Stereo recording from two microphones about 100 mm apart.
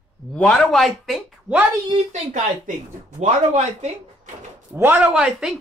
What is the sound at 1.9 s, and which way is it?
Speech, 75° right (ahead or behind).